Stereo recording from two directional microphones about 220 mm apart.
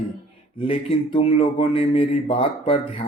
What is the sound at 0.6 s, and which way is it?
Speech, 25° left (ahead or behind).